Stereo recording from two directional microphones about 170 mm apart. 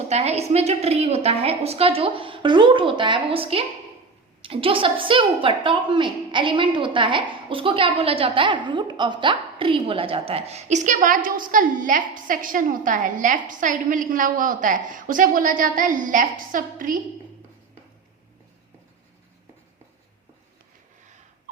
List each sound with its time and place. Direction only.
0.1 s a woman's voice: 40° right (ahead or behind)